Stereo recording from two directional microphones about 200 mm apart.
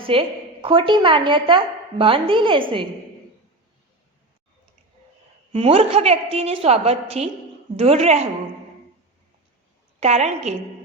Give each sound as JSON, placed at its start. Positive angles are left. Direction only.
{"t": 0.0, "sound": "a woman's voice", "side_deg": -25}
{"t": 5.5, "sound": "a woman's voice", "side_deg": -30}
{"t": 10.0, "sound": "a woman's voice", "side_deg": -35}